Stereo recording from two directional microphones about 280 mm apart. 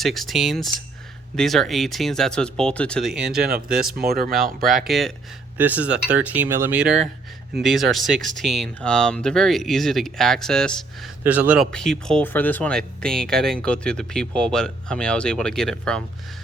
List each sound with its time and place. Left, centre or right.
0.0 s speech: centre
3.3 s speech: right
4.6 s speech: centre